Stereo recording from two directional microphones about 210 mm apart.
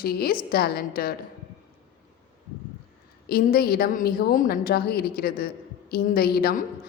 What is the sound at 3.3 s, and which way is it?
A woman's voice, 45° left (ahead or behind).